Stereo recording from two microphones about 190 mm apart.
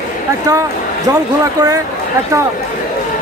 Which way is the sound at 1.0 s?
20° right (ahead or behind).